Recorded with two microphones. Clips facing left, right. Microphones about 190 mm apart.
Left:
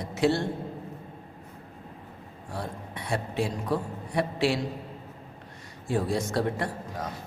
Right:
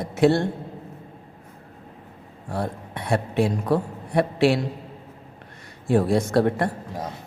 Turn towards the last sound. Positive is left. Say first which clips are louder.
# right 7 dB
turn(degrees=-60)  # may be behind; listen again after turning